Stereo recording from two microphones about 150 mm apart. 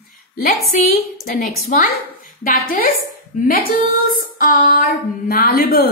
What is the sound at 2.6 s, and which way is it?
Female singing, 70° left (ahead or behind).